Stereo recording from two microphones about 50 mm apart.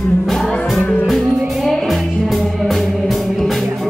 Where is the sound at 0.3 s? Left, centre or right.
Centre.